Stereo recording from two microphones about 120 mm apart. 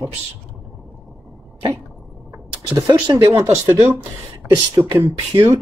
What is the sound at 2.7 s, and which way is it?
Speech, 30° right (ahead or behind).